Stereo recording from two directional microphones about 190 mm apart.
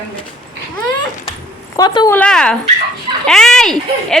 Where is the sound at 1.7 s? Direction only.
20° left (ahead or behind).